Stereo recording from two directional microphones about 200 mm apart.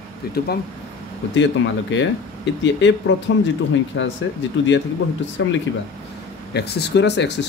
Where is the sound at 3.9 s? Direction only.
75° left (ahead or behind).